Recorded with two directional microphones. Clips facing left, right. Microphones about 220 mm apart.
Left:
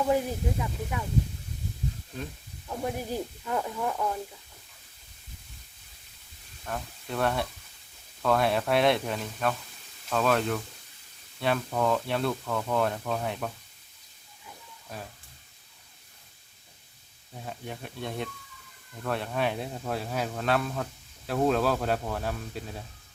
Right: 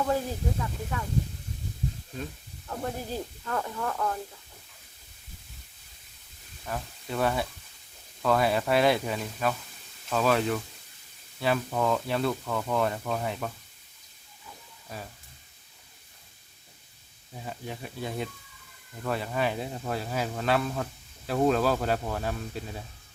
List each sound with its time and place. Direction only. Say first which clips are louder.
0.1 s speech: left 2 dB; 15° left (ahead or behind)
2.6 s speech: left 2 dB; 10° left (ahead or behind)
6.7 s speech: even; centre (ahead or behind)
14.9 s speech: even; centre (ahead or behind)
17.3 s speech: right 1 dB; centre (ahead or behind)